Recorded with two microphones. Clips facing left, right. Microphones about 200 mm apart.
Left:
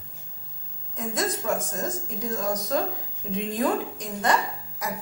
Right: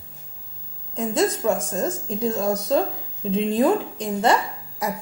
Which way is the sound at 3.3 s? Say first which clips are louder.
Right 6 dB; 25° right (ahead or behind).